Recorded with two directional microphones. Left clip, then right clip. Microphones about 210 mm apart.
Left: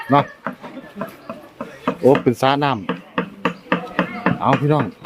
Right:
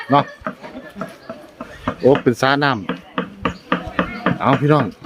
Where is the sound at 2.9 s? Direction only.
45° left (ahead or behind).